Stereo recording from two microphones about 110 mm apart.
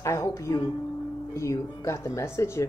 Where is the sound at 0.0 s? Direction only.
25° left (ahead or behind).